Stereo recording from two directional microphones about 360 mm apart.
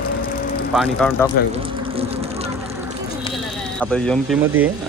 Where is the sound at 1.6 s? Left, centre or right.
Centre.